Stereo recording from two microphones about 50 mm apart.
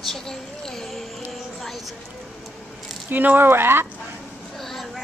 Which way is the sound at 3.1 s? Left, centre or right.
Right.